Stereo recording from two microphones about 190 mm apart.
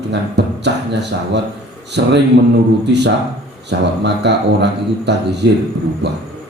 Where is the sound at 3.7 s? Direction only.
65° right (ahead or behind).